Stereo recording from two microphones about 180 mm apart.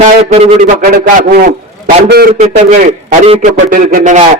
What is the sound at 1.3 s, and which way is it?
Speech, 55° right (ahead or behind).